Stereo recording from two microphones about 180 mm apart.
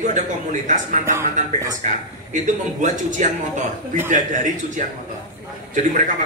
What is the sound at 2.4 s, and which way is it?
A man's voice, 45° right (ahead or behind).